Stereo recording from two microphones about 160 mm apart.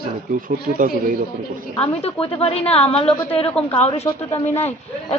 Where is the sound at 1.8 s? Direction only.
35° left (ahead or behind).